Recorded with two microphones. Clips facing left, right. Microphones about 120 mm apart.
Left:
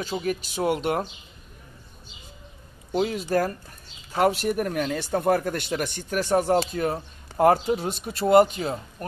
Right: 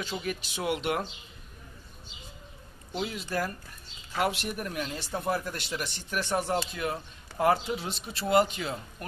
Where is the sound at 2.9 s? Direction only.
45° left (ahead or behind).